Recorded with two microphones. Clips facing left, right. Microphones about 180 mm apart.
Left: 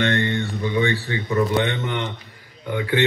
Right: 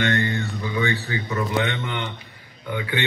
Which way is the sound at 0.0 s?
30° left (ahead or behind).